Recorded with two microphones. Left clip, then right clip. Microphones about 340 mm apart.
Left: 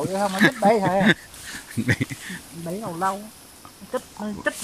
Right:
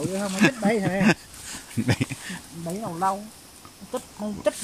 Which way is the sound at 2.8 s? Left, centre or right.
Centre.